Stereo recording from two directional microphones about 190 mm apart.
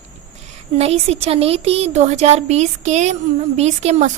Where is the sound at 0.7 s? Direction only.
35° right (ahead or behind).